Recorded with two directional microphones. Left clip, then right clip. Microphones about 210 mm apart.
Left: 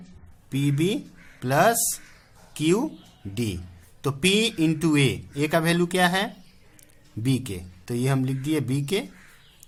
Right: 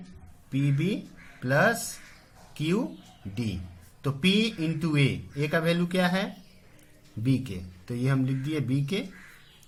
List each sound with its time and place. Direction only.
0.5 s a man's voice: 45° left (ahead or behind)
4.0 s a man's voice: 45° left (ahead or behind)